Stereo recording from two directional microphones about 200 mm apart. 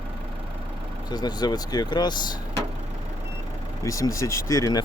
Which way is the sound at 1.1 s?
20° left (ahead or behind).